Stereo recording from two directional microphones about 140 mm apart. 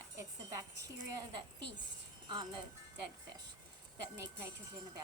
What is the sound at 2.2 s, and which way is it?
Speech, 30° right (ahead or behind).